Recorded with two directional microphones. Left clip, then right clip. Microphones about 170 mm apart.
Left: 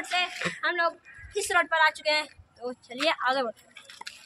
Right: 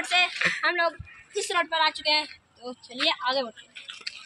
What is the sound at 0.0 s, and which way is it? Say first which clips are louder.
Speech: right 5 dB; 45° right (ahead or behind).